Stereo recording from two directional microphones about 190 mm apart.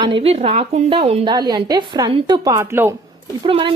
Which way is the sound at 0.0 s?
30° right (ahead or behind).